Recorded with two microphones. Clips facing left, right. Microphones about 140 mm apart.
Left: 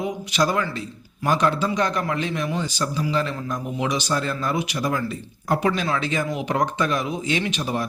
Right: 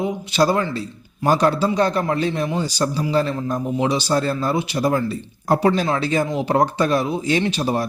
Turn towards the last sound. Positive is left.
turn(degrees=-35)  # may be behind; listen again after turning